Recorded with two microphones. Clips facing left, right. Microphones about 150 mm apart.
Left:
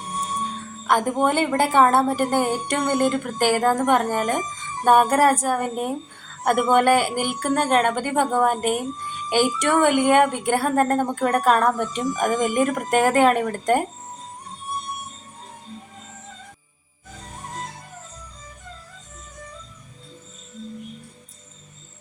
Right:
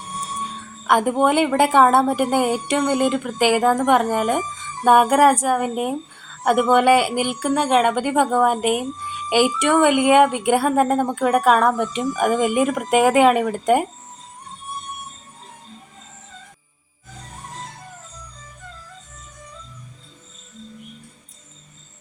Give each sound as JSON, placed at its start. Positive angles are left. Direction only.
{"t": 0.9, "sound": "a woman's voice", "side_deg": -10}
{"t": 7.5, "sound": "a woman's voice", "side_deg": 0}
{"t": 7.9, "sound": "a woman's voice", "side_deg": -10}